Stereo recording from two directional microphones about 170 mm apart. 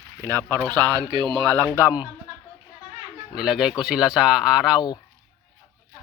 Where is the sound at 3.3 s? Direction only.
5° right (ahead or behind).